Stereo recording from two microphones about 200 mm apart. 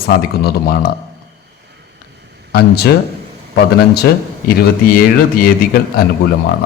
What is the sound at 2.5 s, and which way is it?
Speech, 50° left (ahead or behind).